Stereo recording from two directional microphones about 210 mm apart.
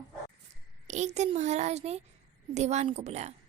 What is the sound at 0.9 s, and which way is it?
A woman's voice, 35° right (ahead or behind).